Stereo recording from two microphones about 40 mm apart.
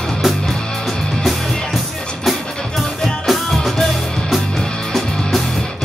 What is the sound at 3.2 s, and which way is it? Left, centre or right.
Music, centre.